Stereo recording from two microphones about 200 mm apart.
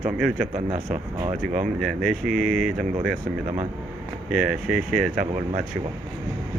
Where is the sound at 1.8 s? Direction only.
Centre (ahead or behind).